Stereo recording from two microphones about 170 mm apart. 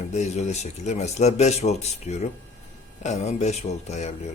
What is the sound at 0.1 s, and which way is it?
A man's voice, 40° left (ahead or behind).